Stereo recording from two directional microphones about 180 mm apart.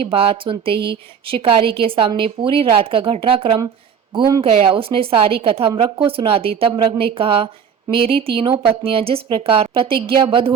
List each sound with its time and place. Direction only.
0.0 s speech: 30° right (ahead or behind)